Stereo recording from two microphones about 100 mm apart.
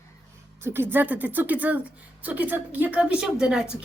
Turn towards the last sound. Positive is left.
turn(degrees=-10)  # may be behind; listen again after turning